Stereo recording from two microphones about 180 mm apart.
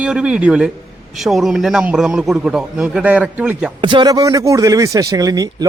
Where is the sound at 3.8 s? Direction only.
25° right (ahead or behind).